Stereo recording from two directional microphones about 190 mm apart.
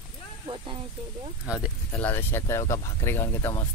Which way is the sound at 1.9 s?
10° left (ahead or behind).